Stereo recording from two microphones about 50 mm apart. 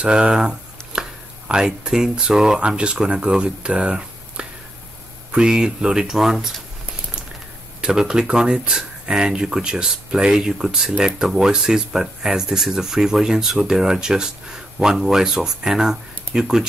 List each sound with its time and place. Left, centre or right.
0.0 s a sound: centre
1.5 s speech: centre
7.8 s speech: centre